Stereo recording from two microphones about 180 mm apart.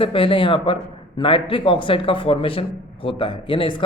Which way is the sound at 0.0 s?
30° left (ahead or behind).